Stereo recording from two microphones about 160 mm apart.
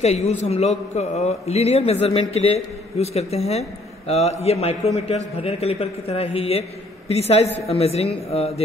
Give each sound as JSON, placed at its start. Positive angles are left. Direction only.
{"t": 0.0, "sound": "a man's voice", "side_deg": 40}